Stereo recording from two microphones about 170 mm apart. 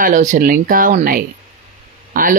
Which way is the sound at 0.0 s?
50° right (ahead or behind).